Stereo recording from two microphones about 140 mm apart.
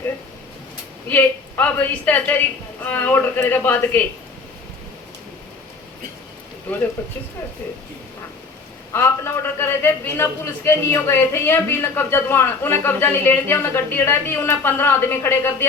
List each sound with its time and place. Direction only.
1.1 s a man's voice: 10° left (ahead or behind)
6.7 s a man's voice: 10° left (ahead or behind)
8.9 s a man's voice: 20° left (ahead or behind)